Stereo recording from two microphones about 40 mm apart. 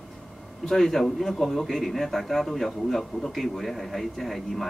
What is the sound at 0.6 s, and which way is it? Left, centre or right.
A man's voice, centre.